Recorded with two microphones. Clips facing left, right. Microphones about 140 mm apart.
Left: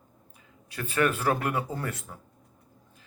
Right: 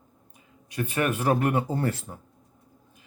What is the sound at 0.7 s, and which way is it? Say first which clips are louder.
Speech: even; 20° right (ahead or behind).